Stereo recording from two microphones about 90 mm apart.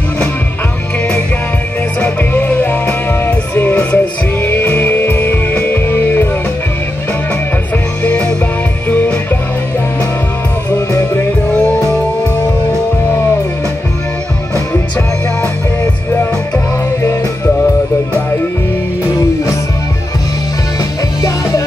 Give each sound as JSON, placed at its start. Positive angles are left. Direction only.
{"t": 2.0, "sound": "music", "side_deg": 20}
{"t": 8.0, "sound": "music", "side_deg": 20}